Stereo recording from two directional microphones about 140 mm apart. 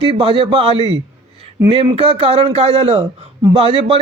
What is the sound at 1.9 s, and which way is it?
A man's voice, 45° right (ahead or behind).